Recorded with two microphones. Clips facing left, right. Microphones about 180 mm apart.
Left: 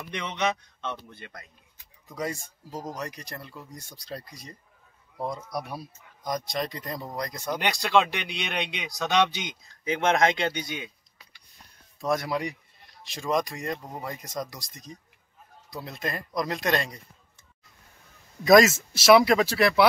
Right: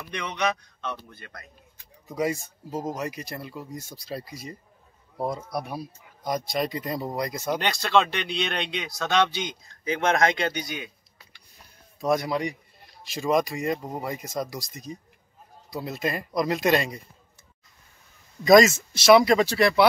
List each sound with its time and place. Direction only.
0.0 s speech: 20° left (ahead or behind)
2.0 s speech: 10° right (ahead or behind)
2.7 s speech: 25° right (ahead or behind)
3.0 s speech: 5° right (ahead or behind)
7.5 s speech: 15° left (ahead or behind)
12.0 s speech: centre (ahead or behind)
18.4 s speech: 5° left (ahead or behind)